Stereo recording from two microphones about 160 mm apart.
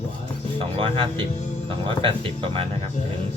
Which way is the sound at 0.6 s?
35° right (ahead or behind).